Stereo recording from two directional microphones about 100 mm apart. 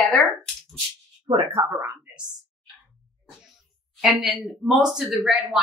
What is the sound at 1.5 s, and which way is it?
Speech, 25° right (ahead or behind).